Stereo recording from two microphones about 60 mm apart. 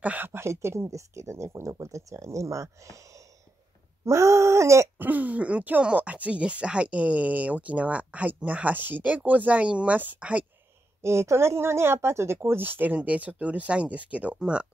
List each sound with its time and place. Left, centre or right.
0.0 s speech: right
0.3 s speech: right
4.0 s speech: right
4.9 s speech: right
11.0 s speech: right; by 14.7 s centre